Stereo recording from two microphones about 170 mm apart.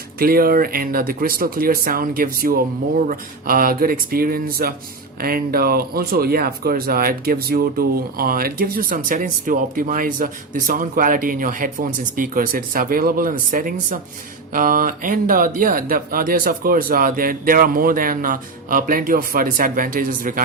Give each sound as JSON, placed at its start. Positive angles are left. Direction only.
{"t": 0.2, "sound": "speech", "side_deg": -60}